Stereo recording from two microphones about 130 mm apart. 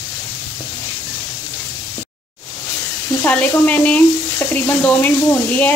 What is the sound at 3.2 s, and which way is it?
Speech, 10° left (ahead or behind).